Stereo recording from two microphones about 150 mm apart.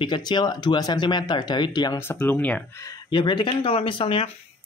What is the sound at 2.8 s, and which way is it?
Speech, 30° left (ahead or behind).